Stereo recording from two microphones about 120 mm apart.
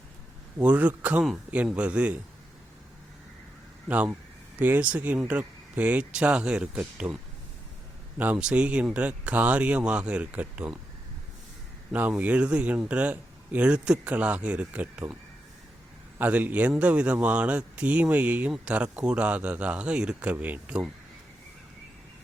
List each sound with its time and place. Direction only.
0.6 s a man's voice: 10° right (ahead or behind)
3.8 s a man's voice: 15° right (ahead or behind)
8.2 s a man's voice: 10° right (ahead or behind)
11.9 s a man's voice: 15° right (ahead or behind)
16.1 s a man's voice: 15° right (ahead or behind)